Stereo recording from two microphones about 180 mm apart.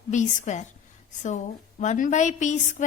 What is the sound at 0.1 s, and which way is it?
Speech, 45° left (ahead or behind).